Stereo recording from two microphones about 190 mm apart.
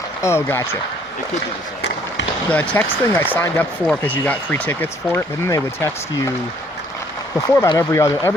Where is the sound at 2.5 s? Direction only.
10° left (ahead or behind).